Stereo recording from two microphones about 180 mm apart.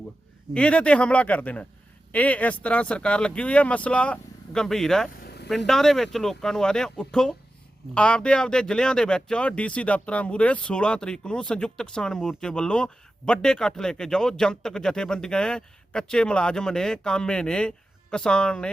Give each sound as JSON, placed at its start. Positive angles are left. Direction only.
{"t": 0.5, "sound": "speech", "side_deg": 5}
{"t": 5.2, "sound": "vehicle", "side_deg": 65}
{"t": 5.5, "sound": "speech", "side_deg": 0}